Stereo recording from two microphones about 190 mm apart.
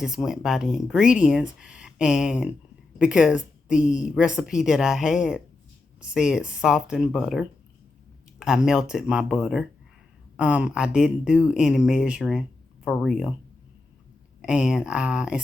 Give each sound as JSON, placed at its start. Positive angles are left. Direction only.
{"t": 0.0, "sound": "speech", "side_deg": -5}
{"t": 14.4, "sound": "speech", "side_deg": -5}